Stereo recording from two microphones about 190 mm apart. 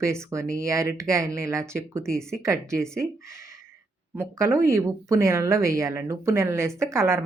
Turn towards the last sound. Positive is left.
turn(degrees=-15)  # may be behind; listen again after turning